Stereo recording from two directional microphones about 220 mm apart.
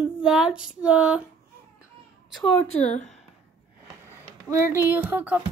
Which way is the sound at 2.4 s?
30° left (ahead or behind).